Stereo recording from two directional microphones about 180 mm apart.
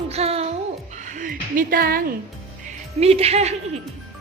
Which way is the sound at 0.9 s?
45° right (ahead or behind).